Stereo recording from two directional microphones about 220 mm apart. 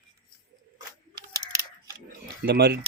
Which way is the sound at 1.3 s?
15° right (ahead or behind).